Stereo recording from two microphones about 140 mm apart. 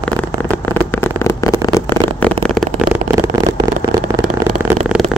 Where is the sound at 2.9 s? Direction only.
20° right (ahead or behind).